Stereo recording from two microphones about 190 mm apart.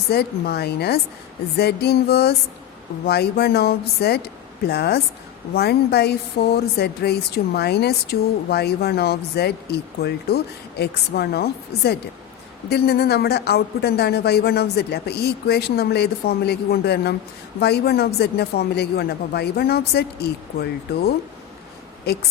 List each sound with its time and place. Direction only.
0.1 s a woman's voice: 55° left (ahead or behind)